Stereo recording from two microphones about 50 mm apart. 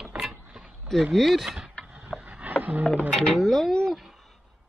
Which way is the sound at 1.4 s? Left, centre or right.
Centre.